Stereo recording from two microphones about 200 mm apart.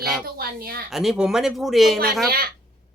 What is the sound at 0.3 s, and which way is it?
Speech, 50° right (ahead or behind).